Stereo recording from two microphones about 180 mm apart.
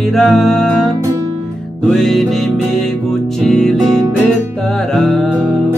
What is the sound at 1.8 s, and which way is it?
Music, centre (ahead or behind).